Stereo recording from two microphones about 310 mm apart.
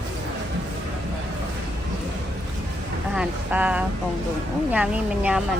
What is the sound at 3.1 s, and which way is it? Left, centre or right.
A woman's voice, centre.